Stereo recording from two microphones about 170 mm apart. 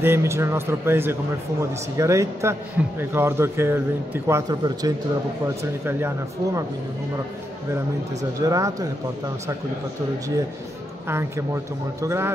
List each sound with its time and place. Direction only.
0.0 s a man's voice: 15° right (ahead or behind)
8.2 s speech: 20° right (ahead or behind)
11.1 s a man's voice: 15° right (ahead or behind)